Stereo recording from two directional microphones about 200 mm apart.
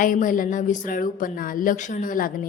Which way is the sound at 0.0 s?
40° left (ahead or behind).